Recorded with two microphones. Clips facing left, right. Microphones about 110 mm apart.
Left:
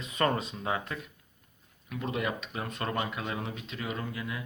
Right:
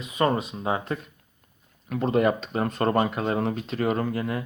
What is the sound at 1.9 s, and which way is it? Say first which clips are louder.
Speech: right 11 dB; 45° right (ahead or behind).